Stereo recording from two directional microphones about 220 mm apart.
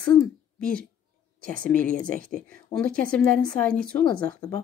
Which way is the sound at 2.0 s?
40° right (ahead or behind).